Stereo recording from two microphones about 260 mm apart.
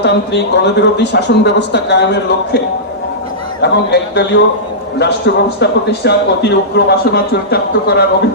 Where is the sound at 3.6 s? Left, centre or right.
Left.